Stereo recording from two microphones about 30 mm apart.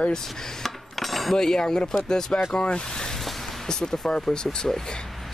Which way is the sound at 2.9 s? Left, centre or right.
Left.